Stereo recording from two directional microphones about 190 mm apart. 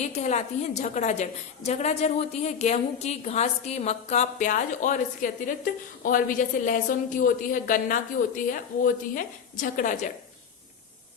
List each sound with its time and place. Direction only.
0.0 s a woman's voice: 35° left (ahead or behind)